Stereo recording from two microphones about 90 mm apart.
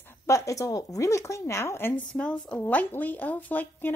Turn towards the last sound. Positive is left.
turn(degrees=20)  # may be behind; listen again after turning